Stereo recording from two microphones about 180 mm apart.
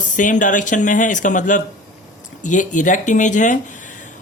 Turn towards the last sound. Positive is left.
turn(degrees=45)  # may be behind; listen again after turning